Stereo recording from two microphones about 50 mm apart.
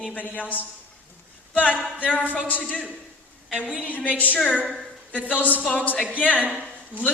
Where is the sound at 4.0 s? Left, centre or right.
Left.